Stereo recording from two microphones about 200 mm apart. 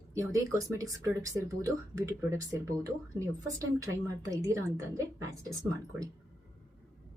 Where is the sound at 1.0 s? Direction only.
15° right (ahead or behind).